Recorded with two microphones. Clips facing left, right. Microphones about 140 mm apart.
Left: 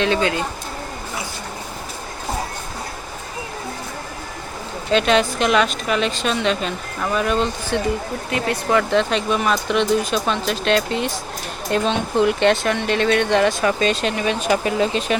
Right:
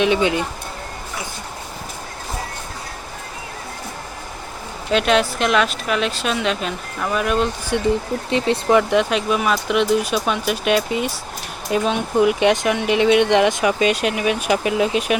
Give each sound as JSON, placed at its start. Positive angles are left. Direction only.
{"t": 0.0, "sound": "speech", "side_deg": -15}
{"t": 4.9, "sound": "speech", "side_deg": 0}
{"t": 8.3, "sound": "speech", "side_deg": -25}
{"t": 8.8, "sound": "speech", "side_deg": -10}